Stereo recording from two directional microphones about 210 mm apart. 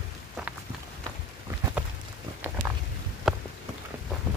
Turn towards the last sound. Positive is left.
turn(degrees=0)  # may be behind; listen again after turning